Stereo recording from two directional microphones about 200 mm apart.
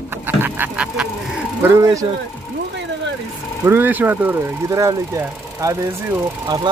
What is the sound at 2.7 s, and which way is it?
Vehicle, 60° right (ahead or behind).